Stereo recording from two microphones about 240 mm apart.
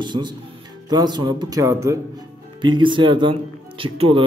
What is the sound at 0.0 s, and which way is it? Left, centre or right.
A man's voice, centre.